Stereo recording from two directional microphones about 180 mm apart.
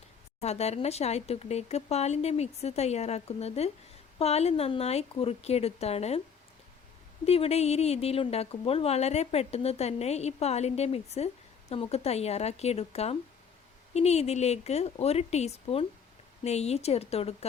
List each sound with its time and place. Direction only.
0.4 s a woman's voice: 35° left (ahead or behind)
7.3 s a woman's voice: 35° left (ahead or behind)